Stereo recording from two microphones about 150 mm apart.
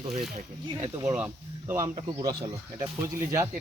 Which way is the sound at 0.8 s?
25° right (ahead or behind).